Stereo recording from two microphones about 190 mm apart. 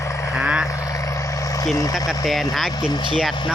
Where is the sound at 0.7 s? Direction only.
15° left (ahead or behind).